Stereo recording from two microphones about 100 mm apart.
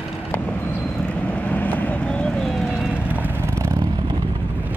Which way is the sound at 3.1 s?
20° right (ahead or behind).